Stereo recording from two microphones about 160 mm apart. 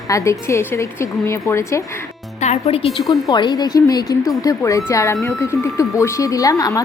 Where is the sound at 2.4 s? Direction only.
40° left (ahead or behind).